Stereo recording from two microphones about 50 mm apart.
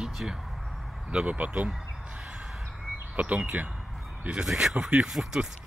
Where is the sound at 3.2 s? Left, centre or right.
Right.